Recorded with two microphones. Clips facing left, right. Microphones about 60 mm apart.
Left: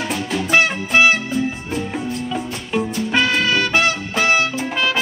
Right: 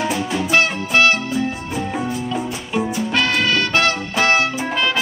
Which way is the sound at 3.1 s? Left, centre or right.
Centre.